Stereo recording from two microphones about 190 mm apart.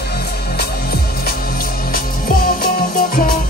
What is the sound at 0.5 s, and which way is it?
Music, 55° left (ahead or behind).